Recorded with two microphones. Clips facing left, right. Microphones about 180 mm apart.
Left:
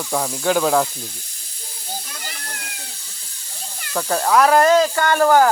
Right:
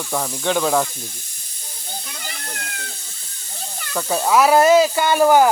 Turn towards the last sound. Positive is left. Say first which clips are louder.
# right 1 dB
turn(degrees=-15)  # may be behind; listen again after turning